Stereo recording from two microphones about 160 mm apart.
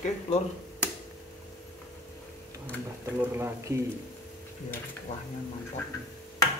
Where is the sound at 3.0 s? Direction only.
15° right (ahead or behind).